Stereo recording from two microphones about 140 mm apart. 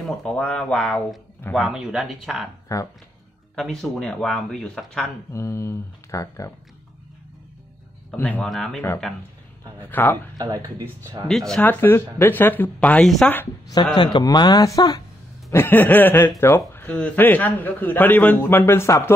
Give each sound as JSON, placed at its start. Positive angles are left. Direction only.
{"t": 0.0, "sound": "speech", "side_deg": 5}
{"t": 2.7, "sound": "speech", "side_deg": 25}
{"t": 3.5, "sound": "speech", "side_deg": 0}
{"t": 5.3, "sound": "speech", "side_deg": 20}
{"t": 8.1, "sound": "a man's voice", "side_deg": 5}
{"t": 9.8, "sound": "a man's voice", "side_deg": 15}
{"t": 10.3, "sound": "speech", "side_deg": -25}
{"t": 11.2, "sound": "speech", "side_deg": 5}
{"t": 11.6, "sound": "a man's voice", "side_deg": 15}
{"t": 13.9, "sound": "speech", "side_deg": 35}
{"t": 15.5, "sound": "a man's voice", "side_deg": 15}